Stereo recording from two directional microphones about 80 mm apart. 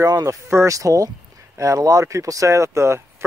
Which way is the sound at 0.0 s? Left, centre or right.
Right.